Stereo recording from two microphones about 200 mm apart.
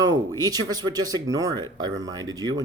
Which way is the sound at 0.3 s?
20° right (ahead or behind).